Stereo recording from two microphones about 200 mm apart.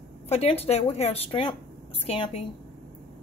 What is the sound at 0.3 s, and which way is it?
Speech, 30° left (ahead or behind).